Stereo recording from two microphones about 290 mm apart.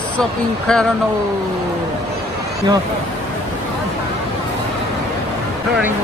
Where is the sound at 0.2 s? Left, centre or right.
Centre.